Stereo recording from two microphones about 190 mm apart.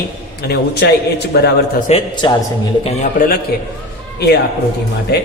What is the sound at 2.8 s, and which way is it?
Speech, 45° left (ahead or behind).